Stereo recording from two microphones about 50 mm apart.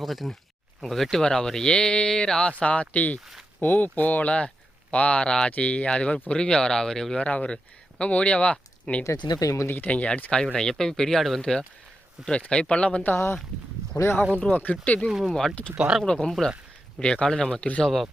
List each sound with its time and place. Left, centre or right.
0.0 s speech: centre
2.5 s speech: left
7.2 s speech: left
9.0 s speech: left
9.8 s speech: left
10.4 s speech: centre
12.5 s speech: centre
13.9 s speech: left
14.5 s speech: left
15.1 s speech: centre
16.1 s speech: centre